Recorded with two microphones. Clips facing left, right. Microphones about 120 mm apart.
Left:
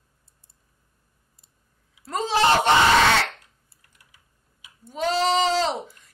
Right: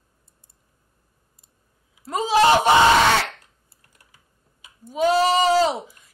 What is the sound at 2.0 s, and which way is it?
Speech, 10° right (ahead or behind).